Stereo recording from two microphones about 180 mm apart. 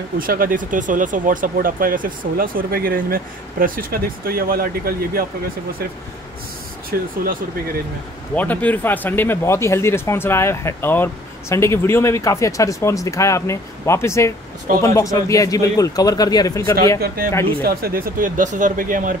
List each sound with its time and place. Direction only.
0.2 s speech: 50° right (ahead or behind)
6.9 s speech: 60° right (ahead or behind)
8.4 s speech: 10° left (ahead or behind)
17.6 s speech: 55° right (ahead or behind)